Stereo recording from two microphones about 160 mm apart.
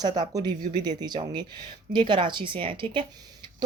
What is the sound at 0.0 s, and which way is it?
Speech, 25° right (ahead or behind).